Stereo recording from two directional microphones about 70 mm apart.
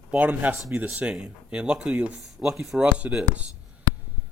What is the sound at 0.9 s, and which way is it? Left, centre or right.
Speech, centre.